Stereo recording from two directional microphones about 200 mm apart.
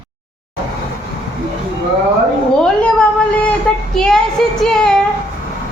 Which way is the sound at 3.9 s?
5° left (ahead or behind).